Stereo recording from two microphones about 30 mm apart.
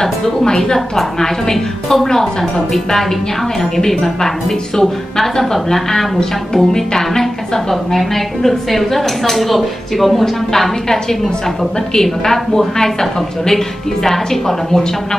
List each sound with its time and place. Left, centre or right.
0.0 s a woman's voice: centre
2.0 s speech: left
3.7 s a woman's voice: centre
11.9 s a woman's voice: centre